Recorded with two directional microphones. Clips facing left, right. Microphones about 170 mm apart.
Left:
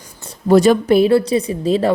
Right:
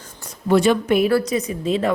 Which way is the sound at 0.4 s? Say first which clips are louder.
Left 5 dB; 40° left (ahead or behind).